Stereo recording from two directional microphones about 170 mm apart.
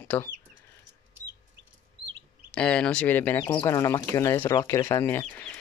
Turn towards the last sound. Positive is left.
turn(degrees=10)  # may be behind; listen again after turning